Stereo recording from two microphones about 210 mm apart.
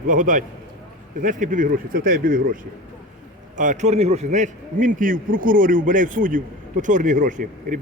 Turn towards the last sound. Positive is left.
turn(degrees=-40)  # may be behind; listen again after turning